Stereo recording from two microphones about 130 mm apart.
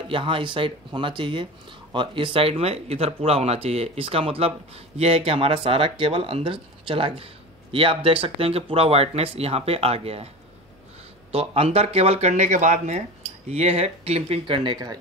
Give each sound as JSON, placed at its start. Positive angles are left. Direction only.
{"t": 0.1, "sound": "speech", "side_deg": -40}
{"t": 11.3, "sound": "speech", "side_deg": -45}